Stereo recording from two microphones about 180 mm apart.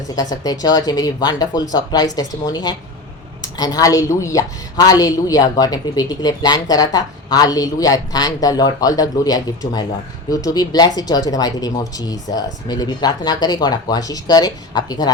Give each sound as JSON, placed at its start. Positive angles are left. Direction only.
{"t": 0.2, "sound": "speech", "side_deg": 20}